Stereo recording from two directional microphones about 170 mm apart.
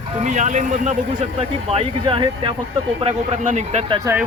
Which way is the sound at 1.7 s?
35° right (ahead or behind).